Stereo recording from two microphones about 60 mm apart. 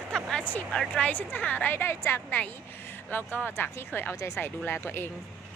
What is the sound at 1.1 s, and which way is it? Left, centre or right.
Speech, left.